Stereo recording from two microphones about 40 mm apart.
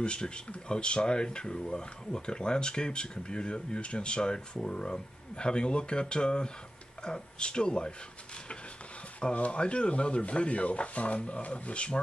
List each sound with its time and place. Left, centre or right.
0.0 s speech: left
9.3 s speech: left